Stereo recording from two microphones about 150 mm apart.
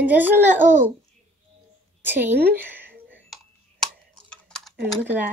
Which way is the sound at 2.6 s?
15° right (ahead or behind).